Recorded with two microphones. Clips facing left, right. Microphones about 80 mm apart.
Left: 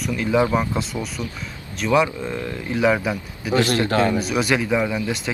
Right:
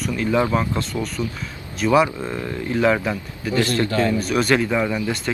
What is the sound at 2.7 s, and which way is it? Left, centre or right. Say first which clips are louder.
Speech: even; centre.